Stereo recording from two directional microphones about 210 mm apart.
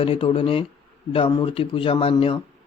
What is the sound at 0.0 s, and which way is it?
Speech, 25° left (ahead or behind).